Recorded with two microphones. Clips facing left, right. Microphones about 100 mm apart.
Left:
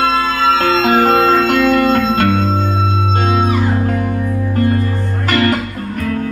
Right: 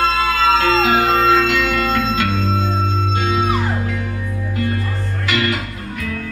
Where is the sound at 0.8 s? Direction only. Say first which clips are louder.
Left 3 dB; 45° left (ahead or behind).